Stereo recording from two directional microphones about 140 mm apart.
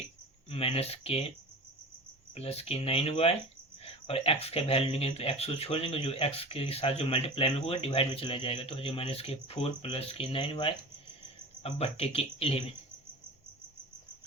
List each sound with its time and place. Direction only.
0.5 s speech: 45° left (ahead or behind)
2.3 s speech: 45° left (ahead or behind)